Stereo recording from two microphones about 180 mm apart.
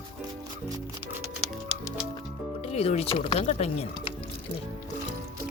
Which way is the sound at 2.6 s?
35° left (ahead or behind).